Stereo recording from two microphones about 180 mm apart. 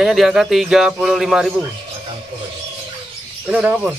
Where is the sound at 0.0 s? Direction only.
Centre (ahead or behind).